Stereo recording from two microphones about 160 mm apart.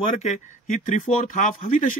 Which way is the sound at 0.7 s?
55° left (ahead or behind).